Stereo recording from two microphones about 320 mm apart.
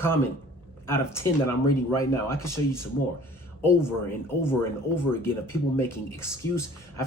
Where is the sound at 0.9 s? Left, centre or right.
Centre.